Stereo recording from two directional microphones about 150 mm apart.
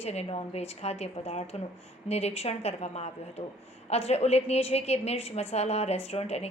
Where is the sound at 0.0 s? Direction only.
45° left (ahead or behind).